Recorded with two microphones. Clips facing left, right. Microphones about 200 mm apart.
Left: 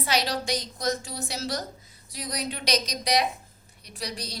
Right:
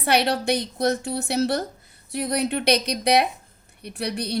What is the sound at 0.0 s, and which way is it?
A woman's voice, 60° right (ahead or behind).